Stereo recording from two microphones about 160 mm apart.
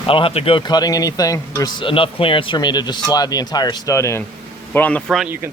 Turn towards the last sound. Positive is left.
turn(degrees=-5)  # may be behind; listen again after turning